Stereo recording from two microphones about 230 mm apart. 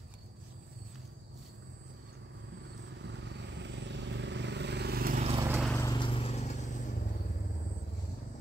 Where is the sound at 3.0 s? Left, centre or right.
Right.